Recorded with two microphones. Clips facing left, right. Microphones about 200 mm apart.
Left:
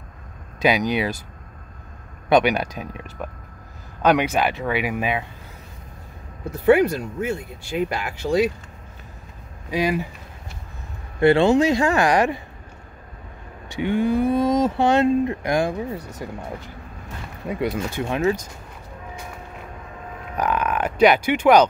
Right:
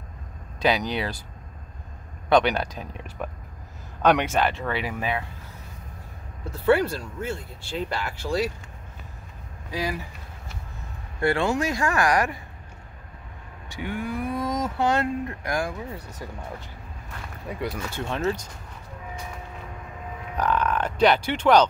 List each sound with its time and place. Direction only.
0.6 s speech: 15° left (ahead or behind)
2.2 s speech: 10° left (ahead or behind)
6.5 s speech: 15° left (ahead or behind)
9.7 s speech: 20° left (ahead or behind)
11.1 s speech: 25° left (ahead or behind)
13.7 s speech: 25° left (ahead or behind)
17.5 s speech: 20° left (ahead or behind)
20.3 s speech: 10° left (ahead or behind)